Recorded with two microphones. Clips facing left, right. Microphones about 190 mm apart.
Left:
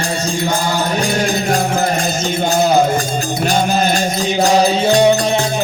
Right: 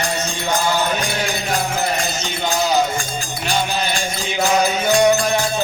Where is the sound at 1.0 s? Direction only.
45° left (ahead or behind); by 5.4 s 25° left (ahead or behind).